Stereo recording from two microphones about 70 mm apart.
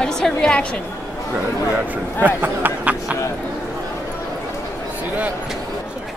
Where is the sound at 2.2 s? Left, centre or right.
Right.